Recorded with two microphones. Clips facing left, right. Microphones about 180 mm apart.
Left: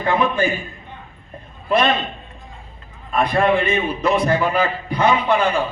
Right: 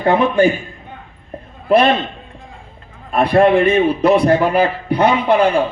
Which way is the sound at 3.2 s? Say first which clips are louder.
Right 6 dB; 55° right (ahead or behind).